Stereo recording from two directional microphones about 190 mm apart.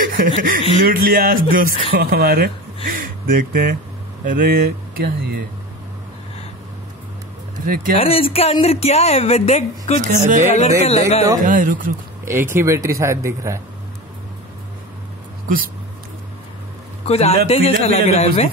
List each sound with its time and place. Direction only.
0.0 s chuckle: 45° right (ahead or behind)
0.8 s speech: 50° right (ahead or behind)
7.6 s speech: 45° right (ahead or behind)
8.0 s a woman's voice: 30° left (ahead or behind)
10.0 s speech: 40° right (ahead or behind)
10.8 s a woman's voice: 35° left (ahead or behind)
11.4 s speech: 45° right (ahead or behind)
12.3 s speech: 10° right (ahead or behind)
15.4 s speech: 50° right (ahead or behind)
17.1 s a woman's voice: 35° left (ahead or behind)